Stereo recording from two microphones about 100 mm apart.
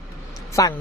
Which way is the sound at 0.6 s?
35° left (ahead or behind).